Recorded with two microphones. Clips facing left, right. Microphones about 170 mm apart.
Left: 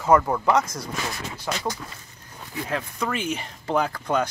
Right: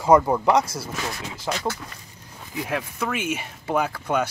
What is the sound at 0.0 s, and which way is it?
Speech, 15° right (ahead or behind).